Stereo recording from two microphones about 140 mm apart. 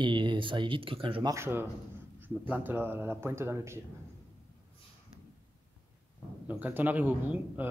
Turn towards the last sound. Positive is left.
turn(degrees=-10)  # may be behind; listen again after turning